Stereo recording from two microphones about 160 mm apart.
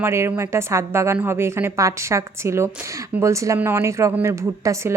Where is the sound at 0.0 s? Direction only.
15° right (ahead or behind).